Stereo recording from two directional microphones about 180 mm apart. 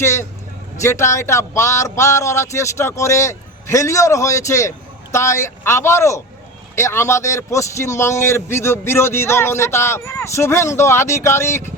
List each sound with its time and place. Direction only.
0.0 s a man's voice: 15° left (ahead or behind)